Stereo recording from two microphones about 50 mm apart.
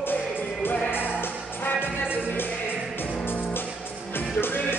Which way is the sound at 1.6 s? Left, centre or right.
Left.